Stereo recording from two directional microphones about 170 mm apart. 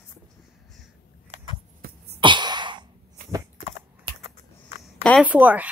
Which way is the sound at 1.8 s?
60° right (ahead or behind).